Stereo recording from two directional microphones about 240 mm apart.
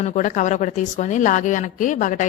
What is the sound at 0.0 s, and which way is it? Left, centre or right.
Speech, left.